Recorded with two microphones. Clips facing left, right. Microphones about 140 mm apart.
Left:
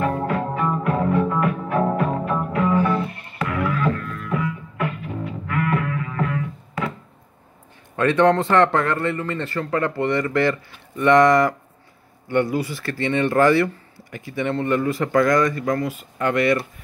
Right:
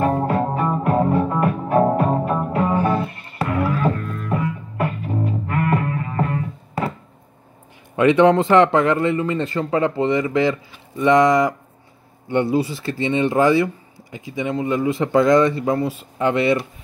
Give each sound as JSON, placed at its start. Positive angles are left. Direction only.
{"t": 0.0, "sound": "music", "side_deg": -35}
{"t": 7.9, "sound": "a man's voice", "side_deg": -10}
{"t": 16.2, "sound": "speech", "side_deg": -20}